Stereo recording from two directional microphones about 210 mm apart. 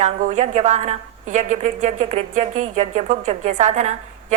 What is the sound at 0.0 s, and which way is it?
A woman's voice, 35° right (ahead or behind).